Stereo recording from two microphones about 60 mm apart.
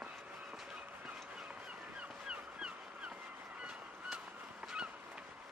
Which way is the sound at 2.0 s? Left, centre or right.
Centre.